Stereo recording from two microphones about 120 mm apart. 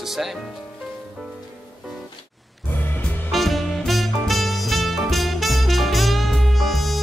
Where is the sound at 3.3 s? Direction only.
Centre (ahead or behind).